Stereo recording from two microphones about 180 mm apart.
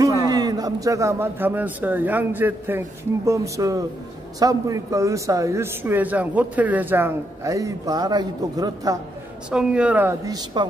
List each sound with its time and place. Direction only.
0.0 s a man's voice: 20° right (ahead or behind)
9.5 s a man's voice: 5° right (ahead or behind); by 10.7 s 25° right (ahead or behind)